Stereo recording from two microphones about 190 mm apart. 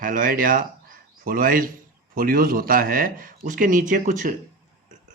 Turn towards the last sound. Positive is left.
turn(degrees=-45)  # may be behind; listen again after turning